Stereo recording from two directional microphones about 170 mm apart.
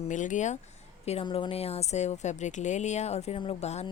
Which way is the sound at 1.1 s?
35° left (ahead or behind).